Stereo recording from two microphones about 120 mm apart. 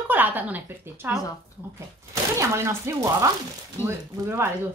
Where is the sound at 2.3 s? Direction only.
25° right (ahead or behind).